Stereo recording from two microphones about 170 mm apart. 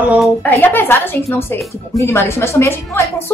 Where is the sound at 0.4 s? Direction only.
10° left (ahead or behind).